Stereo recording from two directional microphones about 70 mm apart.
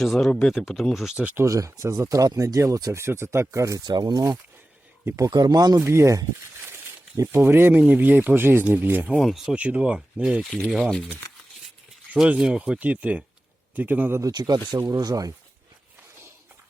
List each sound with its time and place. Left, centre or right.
0.0 s speech: centre
1.1 s speech: right
1.5 s speech: right
3.0 s speech: right
3.8 s speech: right
5.3 s speech: right
5.8 s speech: right
7.4 s speech: right
9.2 s speech: centre
9.6 s speech: centre
12.1 s speech: centre; by 14.2 s right
14.2 s speech: right